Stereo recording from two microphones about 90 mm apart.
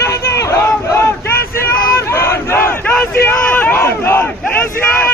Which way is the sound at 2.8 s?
15° left (ahead or behind).